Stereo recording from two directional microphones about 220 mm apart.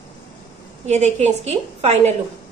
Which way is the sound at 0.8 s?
30° right (ahead or behind).